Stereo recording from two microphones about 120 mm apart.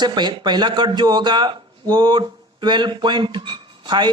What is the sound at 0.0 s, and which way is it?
A man's voice, 40° right (ahead or behind).